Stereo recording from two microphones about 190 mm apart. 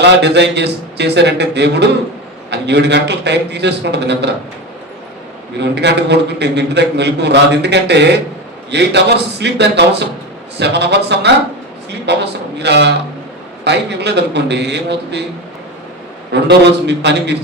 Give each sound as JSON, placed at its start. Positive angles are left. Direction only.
{"t": 0.0, "sound": "a man's voice", "side_deg": -65}
{"t": 5.5, "sound": "a man's voice", "side_deg": -65}
{"t": 16.3, "sound": "a man's voice", "side_deg": -60}